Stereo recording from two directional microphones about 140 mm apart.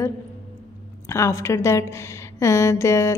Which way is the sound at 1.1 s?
20° left (ahead or behind).